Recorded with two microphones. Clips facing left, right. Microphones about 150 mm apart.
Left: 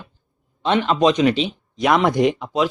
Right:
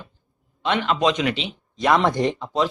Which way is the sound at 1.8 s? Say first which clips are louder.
Left 2 dB; 5° left (ahead or behind).